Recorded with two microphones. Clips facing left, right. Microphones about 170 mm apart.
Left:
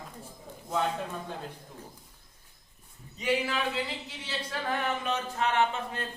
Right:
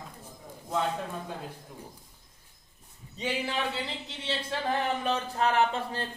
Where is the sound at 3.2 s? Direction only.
30° right (ahead or behind).